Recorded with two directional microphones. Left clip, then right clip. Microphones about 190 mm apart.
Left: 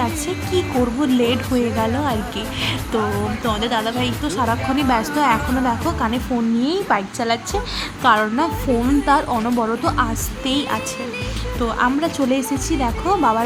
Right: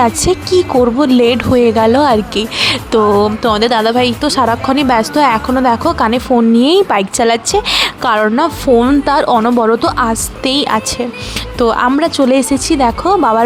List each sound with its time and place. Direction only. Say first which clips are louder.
0.0 s a woman's voice: right 11 dB; 30° right (ahead or behind)